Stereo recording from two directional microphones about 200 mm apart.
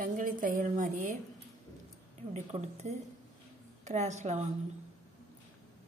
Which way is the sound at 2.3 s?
35° right (ahead or behind).